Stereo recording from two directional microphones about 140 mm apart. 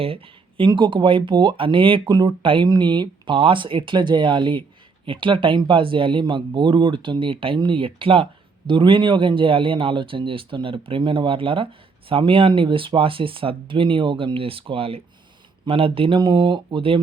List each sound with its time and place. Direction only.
0.0 s speech: 40° right (ahead or behind)